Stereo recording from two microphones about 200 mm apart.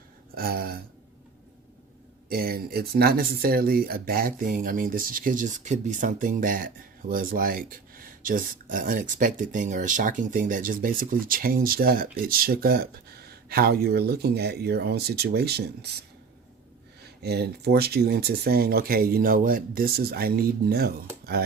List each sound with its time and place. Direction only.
0.3 s a sound: 50° right (ahead or behind)
2.3 s speech: 50° right (ahead or behind)
17.0 s speech: 55° right (ahead or behind)